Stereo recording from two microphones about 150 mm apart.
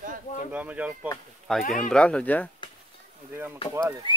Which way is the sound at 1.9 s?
5° left (ahead or behind).